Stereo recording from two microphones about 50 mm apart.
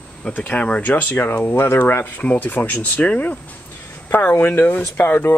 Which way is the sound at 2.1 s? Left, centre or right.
Left.